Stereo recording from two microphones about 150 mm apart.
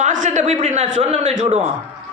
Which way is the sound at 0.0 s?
55° right (ahead or behind).